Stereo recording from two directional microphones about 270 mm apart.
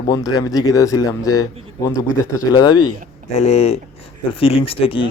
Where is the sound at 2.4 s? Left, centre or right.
Centre.